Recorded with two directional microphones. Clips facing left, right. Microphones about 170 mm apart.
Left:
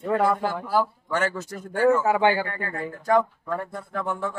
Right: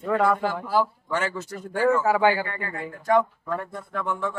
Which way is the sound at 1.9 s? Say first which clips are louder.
Left 1 dB; 20° left (ahead or behind).